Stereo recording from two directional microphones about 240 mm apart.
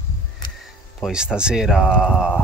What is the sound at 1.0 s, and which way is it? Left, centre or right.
Speech, centre.